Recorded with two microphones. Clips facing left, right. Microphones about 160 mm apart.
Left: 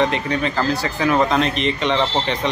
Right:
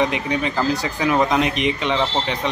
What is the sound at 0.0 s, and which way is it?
Speech, 10° right (ahead or behind).